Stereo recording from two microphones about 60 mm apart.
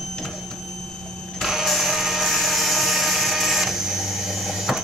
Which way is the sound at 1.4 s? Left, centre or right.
Centre.